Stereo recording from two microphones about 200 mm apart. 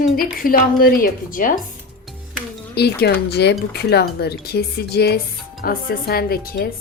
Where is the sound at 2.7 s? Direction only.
55° left (ahead or behind).